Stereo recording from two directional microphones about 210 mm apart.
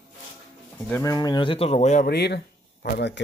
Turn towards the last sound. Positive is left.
turn(degrees=55)  # may be behind; listen again after turning